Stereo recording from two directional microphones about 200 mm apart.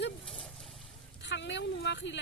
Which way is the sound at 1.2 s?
60° left (ahead or behind).